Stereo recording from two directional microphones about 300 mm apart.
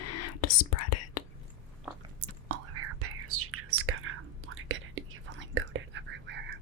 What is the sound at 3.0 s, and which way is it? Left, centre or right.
Whispering, right.